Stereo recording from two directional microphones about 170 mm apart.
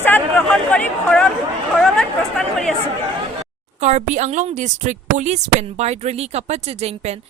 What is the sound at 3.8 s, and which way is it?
A woman's voice, 40° right (ahead or behind).